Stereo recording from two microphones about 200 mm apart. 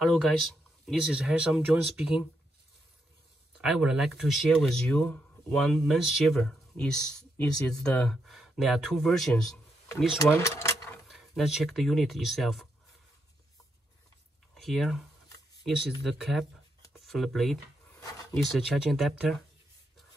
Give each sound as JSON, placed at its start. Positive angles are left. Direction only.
{"t": 0.0, "sound": "speech", "side_deg": 0}
{"t": 3.5, "sound": "speech", "side_deg": -5}
{"t": 10.1, "sound": "speech", "side_deg": 15}
{"t": 11.1, "sound": "speech", "side_deg": 0}
{"t": 14.5, "sound": "speech", "side_deg": 0}